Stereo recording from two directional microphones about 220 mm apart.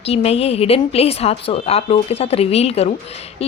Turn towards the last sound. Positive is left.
turn(degrees=30)  # may be behind; listen again after turning